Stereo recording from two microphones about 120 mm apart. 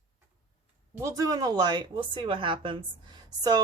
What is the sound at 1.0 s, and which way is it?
Speech, 30° right (ahead or behind).